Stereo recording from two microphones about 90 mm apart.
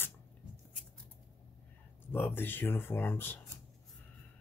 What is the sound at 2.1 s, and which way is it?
Speech, 25° left (ahead or behind).